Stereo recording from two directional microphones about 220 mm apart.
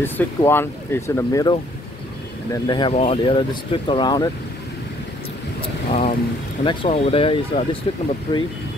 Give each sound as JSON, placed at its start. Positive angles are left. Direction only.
{"t": 0.0, "sound": "speech", "side_deg": 10}
{"t": 5.9, "sound": "speech", "side_deg": 30}